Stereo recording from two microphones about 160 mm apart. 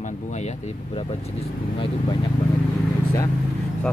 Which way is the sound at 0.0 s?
45° left (ahead or behind).